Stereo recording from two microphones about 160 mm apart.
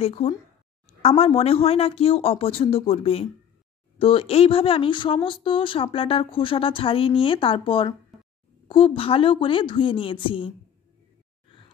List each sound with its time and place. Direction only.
0.0 s speech: 35° left (ahead or behind)
8.1 s a sound: centre (ahead or behind)
8.6 s speech: 30° left (ahead or behind)